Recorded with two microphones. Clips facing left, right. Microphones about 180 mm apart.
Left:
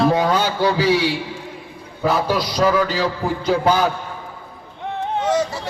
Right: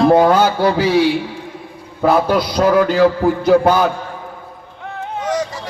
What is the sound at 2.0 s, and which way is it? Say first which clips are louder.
A man's voice: right 5 dB; 60° right (ahead or behind).